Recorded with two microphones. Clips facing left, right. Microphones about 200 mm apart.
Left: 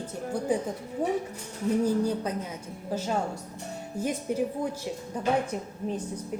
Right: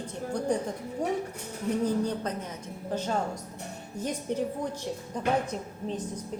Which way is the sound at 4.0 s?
10° left (ahead or behind).